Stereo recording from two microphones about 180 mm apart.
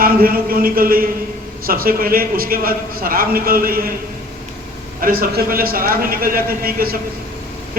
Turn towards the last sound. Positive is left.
turn(degrees=-55)  # may be behind; listen again after turning